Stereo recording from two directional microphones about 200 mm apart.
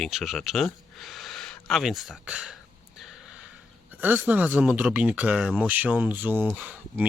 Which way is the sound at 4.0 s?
10° right (ahead or behind).